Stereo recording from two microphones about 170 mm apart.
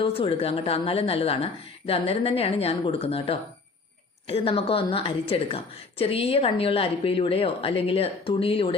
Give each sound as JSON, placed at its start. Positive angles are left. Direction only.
{"t": 0.0, "sound": "a woman's voice", "side_deg": 35}